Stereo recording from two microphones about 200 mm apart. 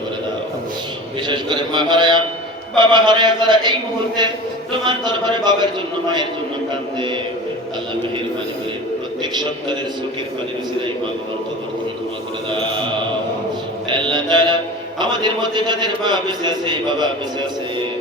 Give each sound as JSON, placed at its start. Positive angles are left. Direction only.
{"t": 1.3, "sound": "a man's voice", "side_deg": -25}
{"t": 4.8, "sound": "a man's voice", "side_deg": -20}
{"t": 9.3, "sound": "a man's voice", "side_deg": -20}
{"t": 13.9, "sound": "a man's voice", "side_deg": -25}